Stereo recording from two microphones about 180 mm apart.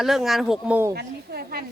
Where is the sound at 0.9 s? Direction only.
60° right (ahead or behind).